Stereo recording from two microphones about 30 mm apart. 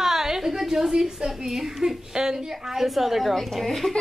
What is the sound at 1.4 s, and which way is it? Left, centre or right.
A woman's voice, centre.